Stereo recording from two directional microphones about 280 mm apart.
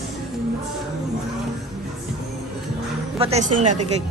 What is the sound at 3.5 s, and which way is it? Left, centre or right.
Speech, right.